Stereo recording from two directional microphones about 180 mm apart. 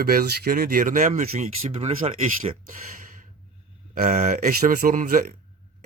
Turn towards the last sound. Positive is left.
turn(degrees=-50)  # may be behind; listen again after turning